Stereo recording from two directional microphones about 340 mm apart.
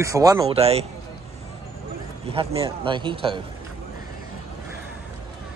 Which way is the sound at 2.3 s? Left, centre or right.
Centre.